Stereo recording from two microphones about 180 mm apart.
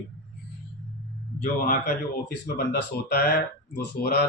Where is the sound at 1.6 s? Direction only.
55° left (ahead or behind).